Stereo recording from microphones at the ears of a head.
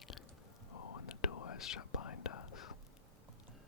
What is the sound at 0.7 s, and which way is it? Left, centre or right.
Whispering, left.